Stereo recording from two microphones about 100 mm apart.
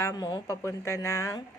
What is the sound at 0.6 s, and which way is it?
Speech, 30° left (ahead or behind).